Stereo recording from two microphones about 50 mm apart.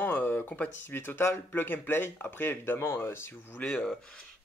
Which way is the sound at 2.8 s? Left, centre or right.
Left.